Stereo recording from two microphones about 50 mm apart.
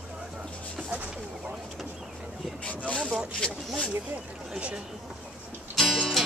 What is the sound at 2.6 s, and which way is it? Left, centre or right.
Speech, left.